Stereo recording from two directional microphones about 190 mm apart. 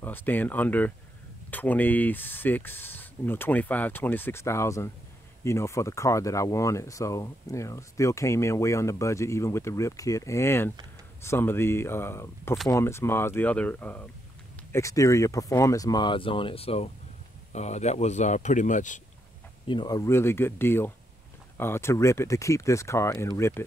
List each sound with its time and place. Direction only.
0.0 s speech: 10° left (ahead or behind); by 18.9 s 40° left (ahead or behind)
19.7 s speech: 20° left (ahead or behind)